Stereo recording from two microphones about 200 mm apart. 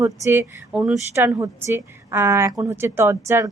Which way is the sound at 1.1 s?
15° right (ahead or behind).